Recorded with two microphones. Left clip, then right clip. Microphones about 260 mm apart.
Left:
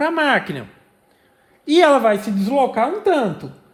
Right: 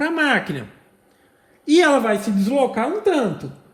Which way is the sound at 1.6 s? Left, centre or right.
Left.